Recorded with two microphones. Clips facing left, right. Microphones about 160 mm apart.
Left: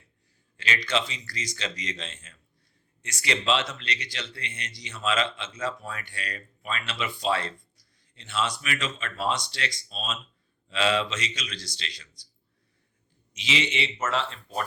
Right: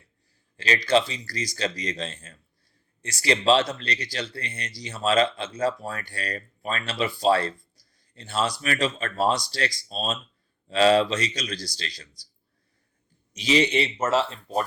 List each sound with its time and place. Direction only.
0.5 s speech: 35° right (ahead or behind)
13.3 s speech: 40° right (ahead or behind)